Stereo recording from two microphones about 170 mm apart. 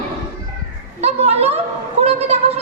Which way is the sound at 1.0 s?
35° right (ahead or behind).